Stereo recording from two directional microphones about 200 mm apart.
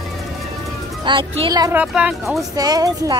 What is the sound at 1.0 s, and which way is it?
Speech, 25° right (ahead or behind).